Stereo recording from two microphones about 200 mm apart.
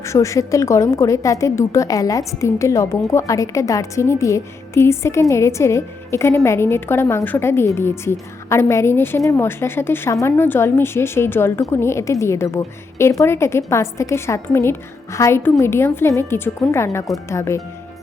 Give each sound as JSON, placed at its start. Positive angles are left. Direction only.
{"t": 0.0, "sound": "a woman's voice", "side_deg": 15}